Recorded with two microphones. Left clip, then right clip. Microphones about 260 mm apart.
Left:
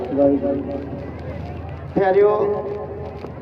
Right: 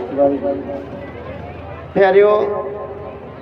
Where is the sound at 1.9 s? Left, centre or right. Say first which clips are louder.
Right 4 dB; right.